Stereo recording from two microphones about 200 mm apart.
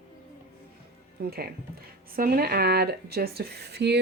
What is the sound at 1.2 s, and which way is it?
Speech, 50° right (ahead or behind).